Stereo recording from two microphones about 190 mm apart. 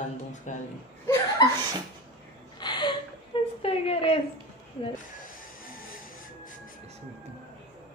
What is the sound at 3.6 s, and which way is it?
Speech, 30° left (ahead or behind).